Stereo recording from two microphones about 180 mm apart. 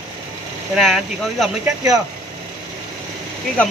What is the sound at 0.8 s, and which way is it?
Speech, centre (ahead or behind).